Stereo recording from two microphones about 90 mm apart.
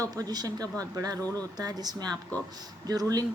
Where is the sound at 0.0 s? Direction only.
45° right (ahead or behind).